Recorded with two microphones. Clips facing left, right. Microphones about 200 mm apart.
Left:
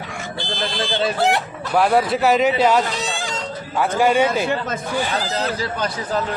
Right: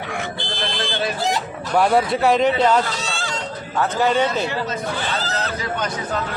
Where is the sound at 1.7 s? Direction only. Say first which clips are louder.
Even; centre (ahead or behind).